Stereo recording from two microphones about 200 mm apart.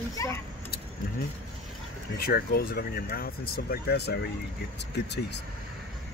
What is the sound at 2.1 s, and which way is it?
Speech, 50° left (ahead or behind).